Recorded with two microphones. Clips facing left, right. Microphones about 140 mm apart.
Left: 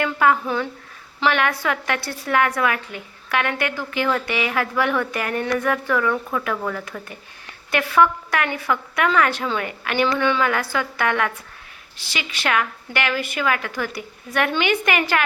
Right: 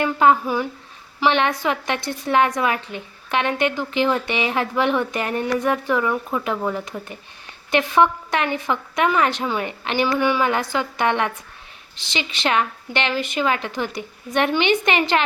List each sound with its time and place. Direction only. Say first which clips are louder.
0.0 s a woman's voice: right 2 dB; 20° right (ahead or behind)